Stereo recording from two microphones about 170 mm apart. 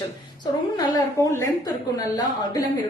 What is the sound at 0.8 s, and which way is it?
Speech, 25° left (ahead or behind).